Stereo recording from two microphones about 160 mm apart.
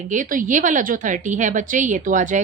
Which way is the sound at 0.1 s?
55° right (ahead or behind).